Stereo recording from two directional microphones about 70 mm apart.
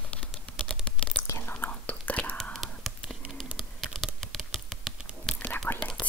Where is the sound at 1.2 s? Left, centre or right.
Left.